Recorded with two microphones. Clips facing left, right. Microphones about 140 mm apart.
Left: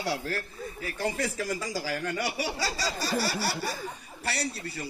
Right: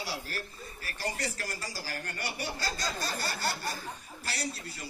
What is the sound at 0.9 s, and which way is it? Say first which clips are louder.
A man's voice: left 5 dB; 90° left.